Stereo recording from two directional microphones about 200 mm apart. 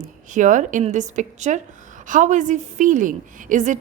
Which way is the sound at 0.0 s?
40° right (ahead or behind).